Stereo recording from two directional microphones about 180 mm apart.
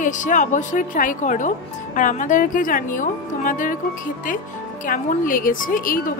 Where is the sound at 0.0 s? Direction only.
45° left (ahead or behind).